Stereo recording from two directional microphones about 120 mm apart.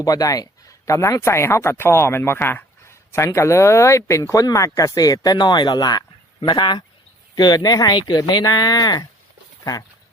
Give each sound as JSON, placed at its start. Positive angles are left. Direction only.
{"t": 0.0, "sound": "speech", "side_deg": 30}